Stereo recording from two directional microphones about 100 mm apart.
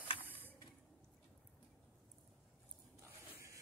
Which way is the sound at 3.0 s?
30° right (ahead or behind).